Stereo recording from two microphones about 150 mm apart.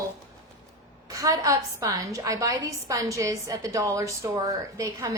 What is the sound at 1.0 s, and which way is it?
A woman's voice, 25° right (ahead or behind).